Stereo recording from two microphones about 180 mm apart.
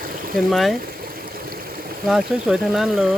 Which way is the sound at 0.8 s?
55° right (ahead or behind).